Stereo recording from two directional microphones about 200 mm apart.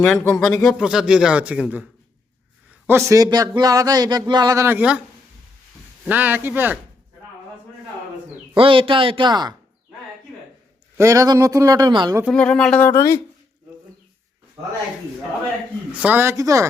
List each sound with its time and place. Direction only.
0.0 s a man's voice: 5° left (ahead or behind)
6.1 s a man's voice: 10° right (ahead or behind)
8.5 s speech: 25° right (ahead or behind)
10.9 s a man's voice: 15° right (ahead or behind)
12.2 s speech: 5° left (ahead or behind)
16.0 s a man's voice: 10° right (ahead or behind)